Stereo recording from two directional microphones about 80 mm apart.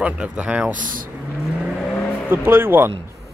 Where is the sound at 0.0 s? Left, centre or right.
Centre.